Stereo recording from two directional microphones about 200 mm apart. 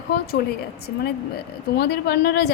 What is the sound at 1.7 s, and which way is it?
Speech, 55° left (ahead or behind).